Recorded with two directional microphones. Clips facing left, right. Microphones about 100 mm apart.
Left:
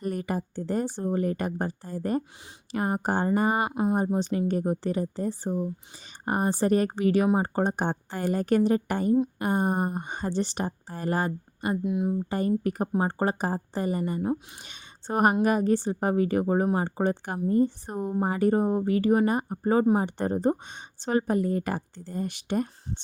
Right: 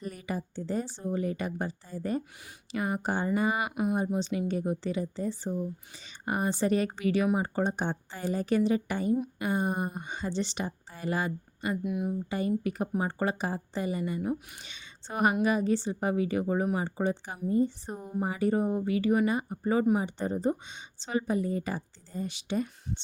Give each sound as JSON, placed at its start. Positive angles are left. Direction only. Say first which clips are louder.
{"t": 0.0, "sound": "speech", "louder": "left 6 dB", "side_deg": 50}
{"t": 3.9, "sound": "speech", "louder": "left 4 dB", "side_deg": 45}
{"t": 11.6, "sound": "speech", "louder": "left 4 dB", "side_deg": 25}
{"t": 12.3, "sound": "speech", "louder": "left 3 dB", "side_deg": 45}
{"t": 20.0, "sound": "speech", "louder": "left 4 dB", "side_deg": 55}